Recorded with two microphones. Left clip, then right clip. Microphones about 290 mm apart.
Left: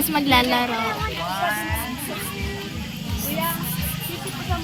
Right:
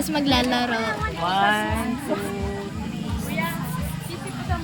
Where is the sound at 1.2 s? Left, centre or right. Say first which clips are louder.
Right 6 dB; right.